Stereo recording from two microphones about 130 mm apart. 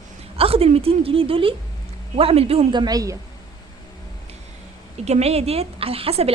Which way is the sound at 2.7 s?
30° right (ahead or behind).